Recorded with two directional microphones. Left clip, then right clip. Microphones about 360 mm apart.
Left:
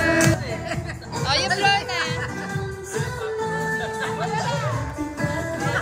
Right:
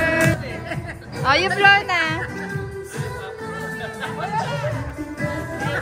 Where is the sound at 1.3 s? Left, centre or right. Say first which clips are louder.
Right 5 dB; centre.